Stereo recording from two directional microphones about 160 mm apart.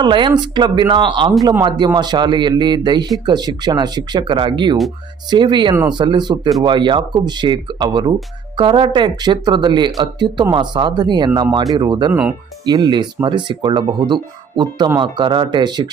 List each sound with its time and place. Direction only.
0.0 s speech: 30° right (ahead or behind)